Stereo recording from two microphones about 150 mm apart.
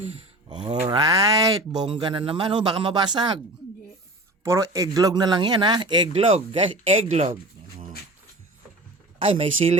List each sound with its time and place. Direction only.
0.4 s speech: 30° right (ahead or behind)
4.4 s speech: 20° right (ahead or behind)
6.1 s speech: 40° right (ahead or behind)
9.1 s speech: 40° right (ahead or behind)